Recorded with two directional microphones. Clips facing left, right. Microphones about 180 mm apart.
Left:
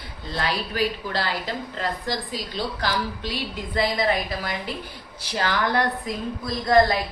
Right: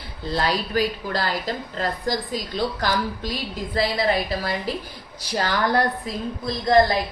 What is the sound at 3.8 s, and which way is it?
A woman's voice, 35° right (ahead or behind).